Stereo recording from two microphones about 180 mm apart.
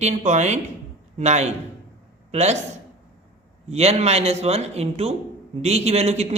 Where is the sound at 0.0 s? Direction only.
40° right (ahead or behind).